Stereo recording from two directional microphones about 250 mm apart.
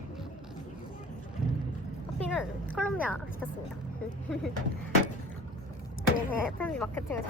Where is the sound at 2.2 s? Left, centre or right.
Centre.